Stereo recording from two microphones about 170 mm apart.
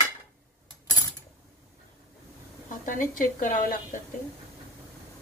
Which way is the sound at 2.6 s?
50° left (ahead or behind).